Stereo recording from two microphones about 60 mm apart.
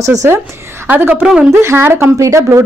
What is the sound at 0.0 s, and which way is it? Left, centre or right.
Speech, right.